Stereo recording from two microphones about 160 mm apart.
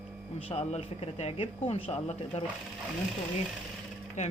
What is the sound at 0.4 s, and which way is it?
A woman's voice, 40° left (ahead or behind).